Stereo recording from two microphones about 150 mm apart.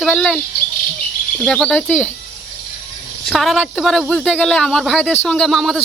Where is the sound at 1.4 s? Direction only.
5° left (ahead or behind).